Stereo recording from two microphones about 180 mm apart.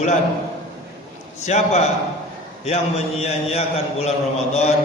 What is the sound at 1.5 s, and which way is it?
A man's voice, 40° left (ahead or behind).